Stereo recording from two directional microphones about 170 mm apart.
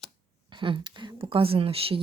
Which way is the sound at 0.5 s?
30° right (ahead or behind).